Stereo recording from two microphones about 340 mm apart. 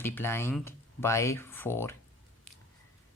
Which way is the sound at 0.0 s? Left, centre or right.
Centre.